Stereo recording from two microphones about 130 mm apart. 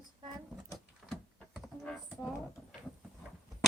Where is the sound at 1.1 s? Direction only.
Centre (ahead or behind).